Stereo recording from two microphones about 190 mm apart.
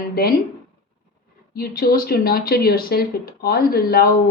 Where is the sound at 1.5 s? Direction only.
55° left (ahead or behind).